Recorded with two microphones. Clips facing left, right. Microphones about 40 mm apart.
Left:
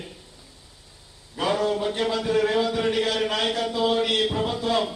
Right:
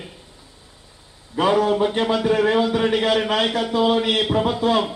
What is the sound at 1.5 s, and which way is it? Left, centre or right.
A man's voice, right.